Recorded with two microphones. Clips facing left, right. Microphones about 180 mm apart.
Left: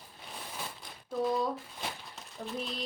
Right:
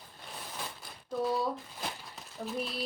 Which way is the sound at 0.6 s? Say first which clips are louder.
Even; centre (ahead or behind).